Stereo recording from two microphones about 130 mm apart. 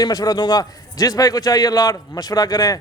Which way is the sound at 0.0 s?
30° left (ahead or behind).